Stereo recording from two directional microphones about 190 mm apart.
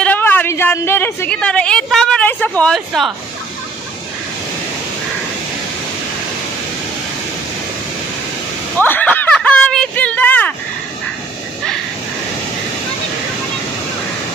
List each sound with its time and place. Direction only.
0.0 s a woman's voice: 10° left (ahead or behind)
8.7 s speech: 10° left (ahead or behind)